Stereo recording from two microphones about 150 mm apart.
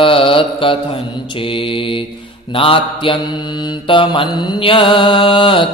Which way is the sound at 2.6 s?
35° left (ahead or behind).